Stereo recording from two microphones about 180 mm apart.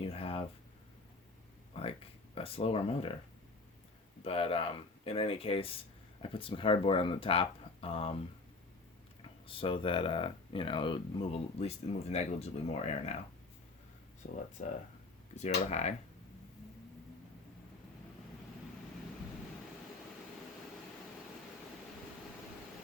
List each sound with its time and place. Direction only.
0.0 s speech: 30° left (ahead or behind)
1.7 s speech: 30° left (ahead or behind)
4.2 s speech: 30° left (ahead or behind)
9.5 s speech: 30° left (ahead or behind)
14.6 s speech: 45° left (ahead or behind)